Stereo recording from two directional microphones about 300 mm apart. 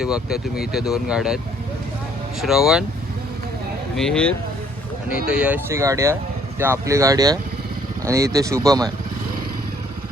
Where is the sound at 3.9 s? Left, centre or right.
Centre.